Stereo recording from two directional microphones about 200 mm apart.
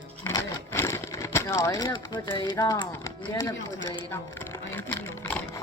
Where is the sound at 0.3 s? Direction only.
15° left (ahead or behind).